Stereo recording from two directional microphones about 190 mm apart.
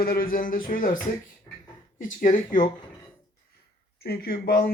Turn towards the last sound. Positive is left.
turn(degrees=50)  # may be behind; listen again after turning